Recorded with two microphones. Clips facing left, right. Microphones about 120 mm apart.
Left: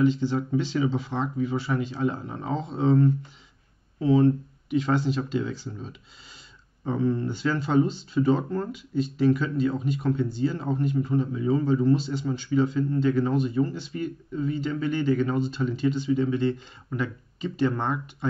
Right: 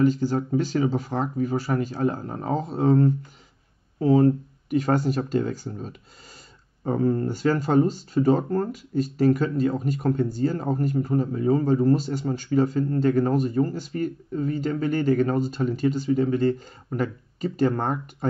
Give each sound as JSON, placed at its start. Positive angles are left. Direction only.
{"t": 0.0, "sound": "speech", "side_deg": -45}